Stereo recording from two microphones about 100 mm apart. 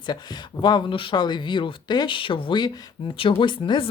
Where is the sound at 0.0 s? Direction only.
45° left (ahead or behind).